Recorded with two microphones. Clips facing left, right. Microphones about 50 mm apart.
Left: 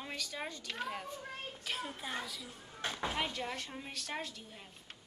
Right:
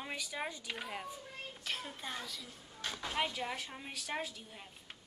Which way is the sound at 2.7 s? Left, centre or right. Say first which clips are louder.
Left 4 dB; left.